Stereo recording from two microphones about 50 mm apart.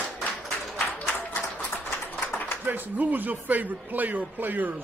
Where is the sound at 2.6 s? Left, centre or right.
Right.